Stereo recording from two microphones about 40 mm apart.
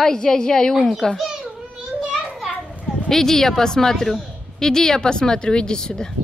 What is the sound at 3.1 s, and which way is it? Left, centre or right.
Speech, centre.